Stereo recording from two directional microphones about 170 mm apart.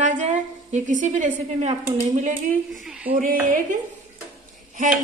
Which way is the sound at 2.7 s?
Centre (ahead or behind).